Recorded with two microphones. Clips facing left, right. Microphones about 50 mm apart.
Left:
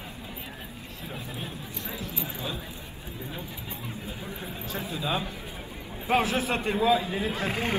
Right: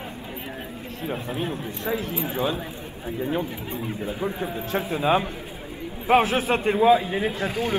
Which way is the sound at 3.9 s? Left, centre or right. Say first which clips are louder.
Right 12 dB; right.